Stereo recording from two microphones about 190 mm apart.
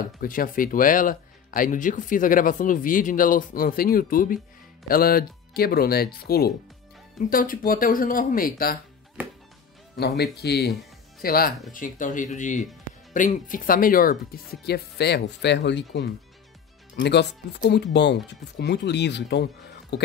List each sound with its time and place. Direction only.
0.2 s speech: 45° left (ahead or behind)
9.9 s speech: 60° left (ahead or behind)